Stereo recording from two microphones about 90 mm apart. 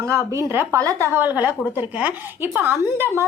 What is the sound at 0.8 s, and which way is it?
Speech, 35° right (ahead or behind).